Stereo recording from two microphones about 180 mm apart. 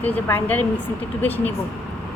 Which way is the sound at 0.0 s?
10° left (ahead or behind).